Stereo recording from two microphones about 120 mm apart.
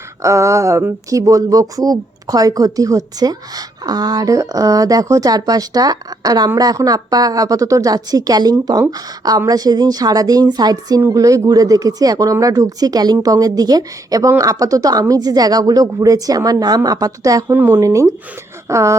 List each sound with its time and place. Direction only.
0.2 s speech: 25° right (ahead or behind)
17.5 s speech: 20° right (ahead or behind)